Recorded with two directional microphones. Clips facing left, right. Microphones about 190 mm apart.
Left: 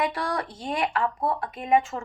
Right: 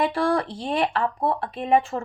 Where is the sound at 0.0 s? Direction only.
30° right (ahead or behind).